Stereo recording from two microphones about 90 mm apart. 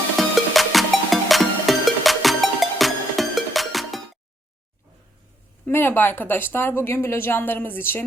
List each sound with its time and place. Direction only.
0.2 s music: centre (ahead or behind)
5.6 s a woman's voice: 20° left (ahead or behind)